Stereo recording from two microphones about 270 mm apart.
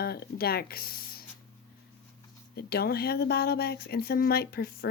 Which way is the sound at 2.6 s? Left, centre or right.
Left.